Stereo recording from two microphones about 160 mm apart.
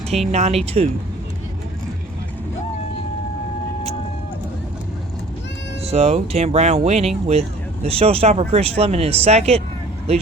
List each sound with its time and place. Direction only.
0.3 s speech: 45° right (ahead or behind)
5.8 s speech: 40° right (ahead or behind)